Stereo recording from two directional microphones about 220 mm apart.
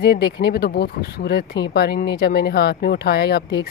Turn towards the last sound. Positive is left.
turn(degrees=50)  # may be behind; listen again after turning